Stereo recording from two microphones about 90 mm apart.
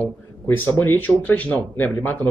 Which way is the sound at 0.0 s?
25° left (ahead or behind).